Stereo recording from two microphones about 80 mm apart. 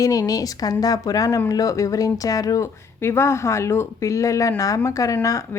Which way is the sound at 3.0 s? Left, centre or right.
Left.